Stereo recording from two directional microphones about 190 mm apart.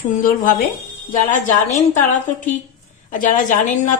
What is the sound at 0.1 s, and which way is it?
Speech, 45° left (ahead or behind).